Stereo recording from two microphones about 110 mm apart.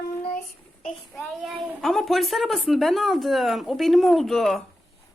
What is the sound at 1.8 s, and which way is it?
Speech, centre (ahead or behind).